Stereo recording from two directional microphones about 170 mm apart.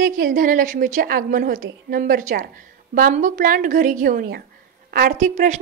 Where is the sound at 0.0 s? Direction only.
55° right (ahead or behind).